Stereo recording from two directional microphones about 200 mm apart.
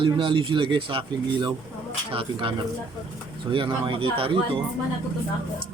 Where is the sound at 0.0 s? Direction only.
25° right (ahead or behind).